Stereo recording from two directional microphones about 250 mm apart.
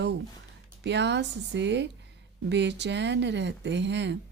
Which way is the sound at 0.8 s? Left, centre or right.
Right.